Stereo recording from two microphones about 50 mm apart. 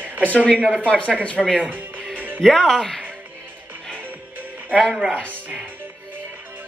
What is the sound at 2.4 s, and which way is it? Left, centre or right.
Speech, centre.